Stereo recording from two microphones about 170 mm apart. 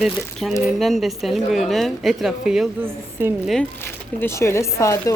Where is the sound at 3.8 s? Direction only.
15° left (ahead or behind).